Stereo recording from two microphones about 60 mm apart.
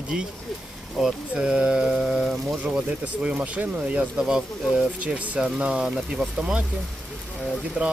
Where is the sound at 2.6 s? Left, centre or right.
Right.